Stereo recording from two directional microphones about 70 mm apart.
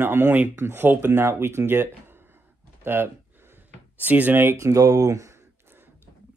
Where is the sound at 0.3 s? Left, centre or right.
Right.